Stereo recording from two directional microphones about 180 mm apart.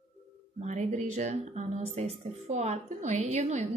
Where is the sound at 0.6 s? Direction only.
40° right (ahead or behind).